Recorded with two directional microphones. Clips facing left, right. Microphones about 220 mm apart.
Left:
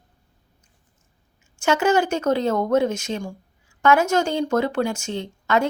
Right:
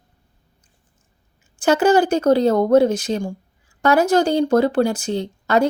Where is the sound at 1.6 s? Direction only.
35° right (ahead or behind).